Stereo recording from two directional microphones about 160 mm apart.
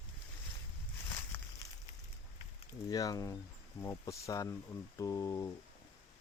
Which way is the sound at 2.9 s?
20° left (ahead or behind).